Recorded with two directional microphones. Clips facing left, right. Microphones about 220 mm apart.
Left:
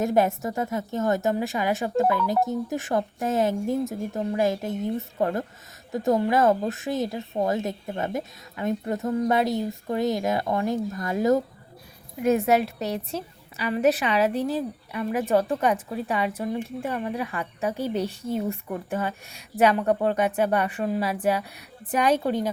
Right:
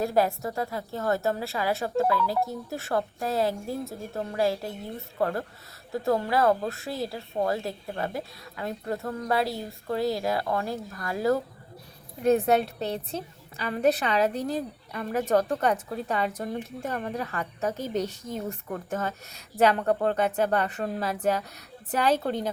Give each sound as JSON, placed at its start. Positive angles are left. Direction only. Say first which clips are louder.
{"t": 0.0, "sound": "speech", "louder": "left 2 dB", "side_deg": 20}
{"t": 13.6, "sound": "a woman's voice", "louder": "left 2 dB", "side_deg": 10}